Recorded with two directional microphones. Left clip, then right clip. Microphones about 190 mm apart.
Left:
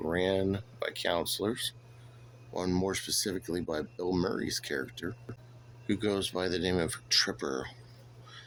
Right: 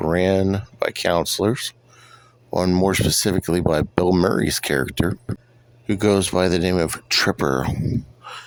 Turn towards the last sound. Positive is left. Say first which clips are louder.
# right 14 dB
turn(degrees=-50)  # may be behind; listen again after turning